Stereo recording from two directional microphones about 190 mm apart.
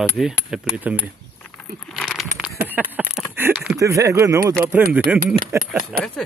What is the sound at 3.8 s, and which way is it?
Speech, 15° right (ahead or behind).